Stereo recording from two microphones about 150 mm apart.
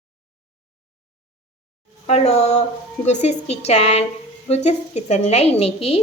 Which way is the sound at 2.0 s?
45° left (ahead or behind).